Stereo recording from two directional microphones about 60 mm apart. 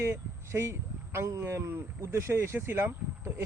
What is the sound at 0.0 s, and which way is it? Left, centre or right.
Speech, right.